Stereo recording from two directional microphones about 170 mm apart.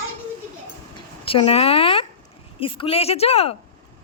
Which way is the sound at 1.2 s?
35° left (ahead or behind).